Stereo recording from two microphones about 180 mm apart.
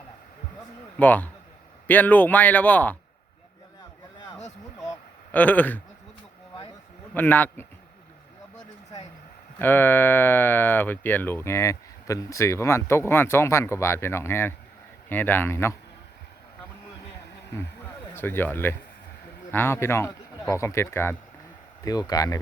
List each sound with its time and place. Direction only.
0.9 s speech: 10° left (ahead or behind)
4.8 s a sound: 15° left (ahead or behind)
7.1 s speech: 10° left (ahead or behind)
9.6 s speech: 10° left (ahead or behind)
18.1 s speech: 10° left (ahead or behind)